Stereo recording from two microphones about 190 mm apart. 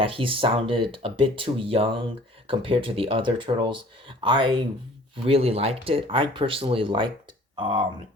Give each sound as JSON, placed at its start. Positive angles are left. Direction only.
{"t": 0.0, "sound": "speech", "side_deg": -30}